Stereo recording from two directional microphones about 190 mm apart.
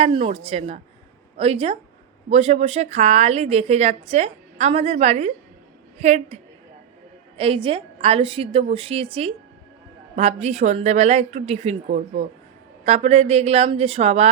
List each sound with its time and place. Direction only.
0.0 s a woman's voice: 30° right (ahead or behind)